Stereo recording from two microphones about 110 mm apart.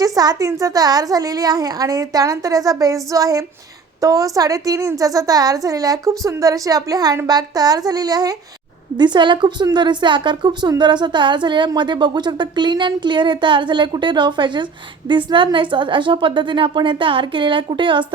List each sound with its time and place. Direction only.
0.0 s a woman's voice: 35° right (ahead or behind)